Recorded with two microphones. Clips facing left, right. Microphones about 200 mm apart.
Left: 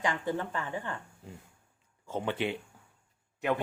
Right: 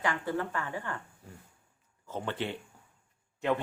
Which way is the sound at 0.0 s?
20° left (ahead or behind).